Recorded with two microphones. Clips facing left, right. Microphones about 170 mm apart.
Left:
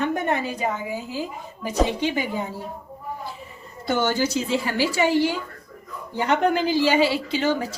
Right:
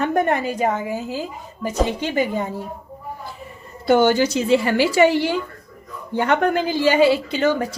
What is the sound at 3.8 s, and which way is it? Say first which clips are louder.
A woman's voice: right 7 dB; 60° right (ahead or behind).